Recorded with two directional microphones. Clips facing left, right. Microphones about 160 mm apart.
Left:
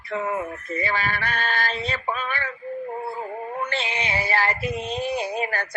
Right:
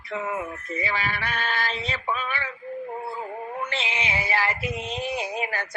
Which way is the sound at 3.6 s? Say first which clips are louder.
Left 3 dB; 35° left (ahead or behind).